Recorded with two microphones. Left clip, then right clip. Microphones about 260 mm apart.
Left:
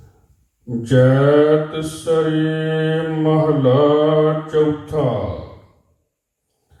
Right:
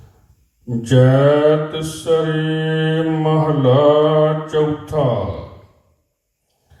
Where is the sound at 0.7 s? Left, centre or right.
Right.